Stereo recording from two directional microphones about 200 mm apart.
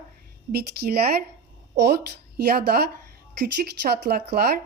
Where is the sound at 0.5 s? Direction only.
50° right (ahead or behind).